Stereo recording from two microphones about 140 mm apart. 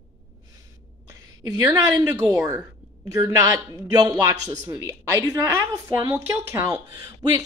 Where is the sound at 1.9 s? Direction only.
25° right (ahead or behind).